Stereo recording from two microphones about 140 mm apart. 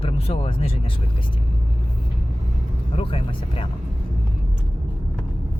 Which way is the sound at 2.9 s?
40° left (ahead or behind).